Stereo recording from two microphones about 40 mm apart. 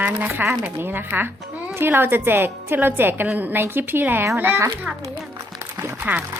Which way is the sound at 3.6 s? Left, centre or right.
Right.